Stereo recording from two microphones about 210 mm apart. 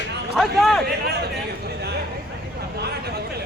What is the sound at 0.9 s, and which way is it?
Speech, 50° right (ahead or behind).